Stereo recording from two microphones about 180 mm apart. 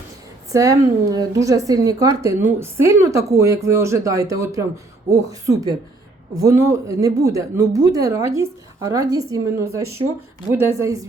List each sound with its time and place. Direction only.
0.5 s a woman's voice: 20° right (ahead or behind)